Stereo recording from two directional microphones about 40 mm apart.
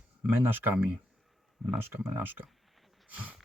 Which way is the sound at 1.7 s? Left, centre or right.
Right.